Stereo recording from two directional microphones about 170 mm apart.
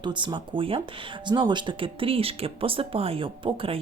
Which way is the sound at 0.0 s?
25° right (ahead or behind).